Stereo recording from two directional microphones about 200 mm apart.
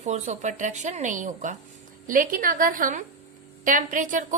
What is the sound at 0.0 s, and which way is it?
A woman's voice, 35° right (ahead or behind).